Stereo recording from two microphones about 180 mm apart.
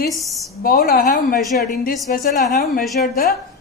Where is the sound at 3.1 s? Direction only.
55° left (ahead or behind).